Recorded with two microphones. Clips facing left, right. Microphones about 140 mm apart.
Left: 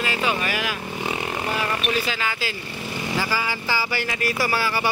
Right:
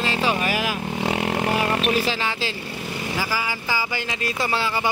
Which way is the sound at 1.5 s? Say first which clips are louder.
Right 2 dB; 35° right (ahead or behind).